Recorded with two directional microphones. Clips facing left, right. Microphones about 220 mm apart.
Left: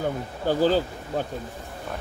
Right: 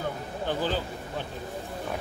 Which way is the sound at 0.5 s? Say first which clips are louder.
Left 9 dB; 40° left (ahead or behind).